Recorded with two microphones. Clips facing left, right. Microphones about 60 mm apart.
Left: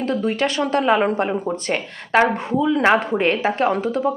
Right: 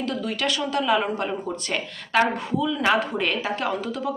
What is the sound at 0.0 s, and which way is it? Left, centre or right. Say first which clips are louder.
A woman's voice: left 6 dB; left.